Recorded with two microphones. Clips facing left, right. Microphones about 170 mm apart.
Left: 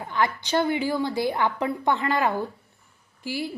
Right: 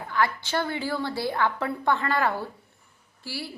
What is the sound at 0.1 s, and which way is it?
A woman's voice, 20° left (ahead or behind).